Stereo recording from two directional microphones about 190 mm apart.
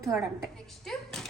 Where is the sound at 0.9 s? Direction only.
Centre (ahead or behind).